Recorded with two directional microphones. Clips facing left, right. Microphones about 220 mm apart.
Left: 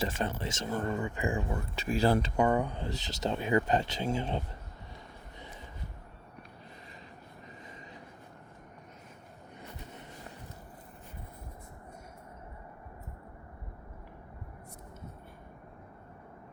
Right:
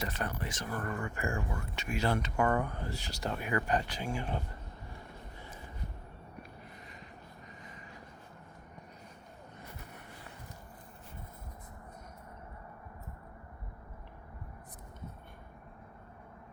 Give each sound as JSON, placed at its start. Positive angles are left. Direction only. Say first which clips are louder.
{"t": 0.0, "sound": "speech", "louder": "left 4 dB", "side_deg": 25}
{"t": 1.5, "sound": "speech", "louder": "left 5 dB", "side_deg": 35}
{"t": 2.3, "sound": "speech", "louder": "left 3 dB", "side_deg": 15}